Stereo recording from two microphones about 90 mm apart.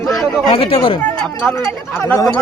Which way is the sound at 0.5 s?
90° left.